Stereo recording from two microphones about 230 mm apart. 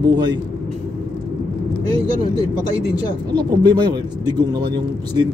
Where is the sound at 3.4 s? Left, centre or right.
Centre.